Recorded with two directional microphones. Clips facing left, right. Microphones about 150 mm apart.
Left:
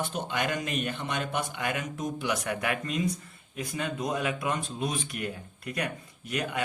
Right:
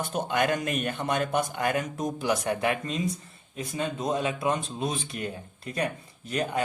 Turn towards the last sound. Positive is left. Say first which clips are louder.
# right 3 dB
turn(degrees=-35)  # may be behind; listen again after turning